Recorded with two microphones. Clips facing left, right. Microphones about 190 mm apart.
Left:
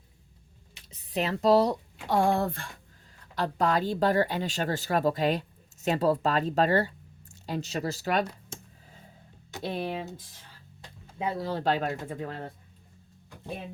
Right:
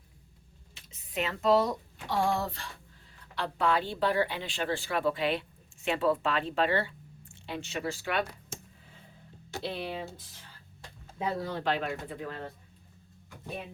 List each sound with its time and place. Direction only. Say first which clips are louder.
1.1 s a woman's voice: left 3 dB; 35° left (ahead or behind)
2.0 s speech: left 4 dB; 55° left (ahead or behind)
3.3 s a woman's voice: left 2 dB; 40° left (ahead or behind)
9.6 s speech: left 4 dB; 45° left (ahead or behind)
11.3 s a woman's voice: left 5 dB; 35° left (ahead or behind)